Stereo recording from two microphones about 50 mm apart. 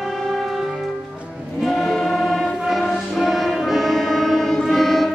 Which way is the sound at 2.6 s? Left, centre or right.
Centre.